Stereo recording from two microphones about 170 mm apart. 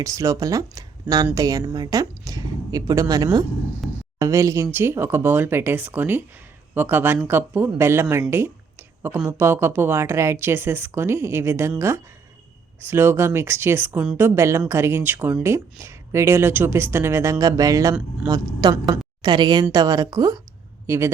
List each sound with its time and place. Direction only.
0.0 s a woman's voice: 20° right (ahead or behind)
3.8 s a sound: centre (ahead or behind)
4.2 s speech: 20° right (ahead or behind)
12.8 s speech: 15° right (ahead or behind)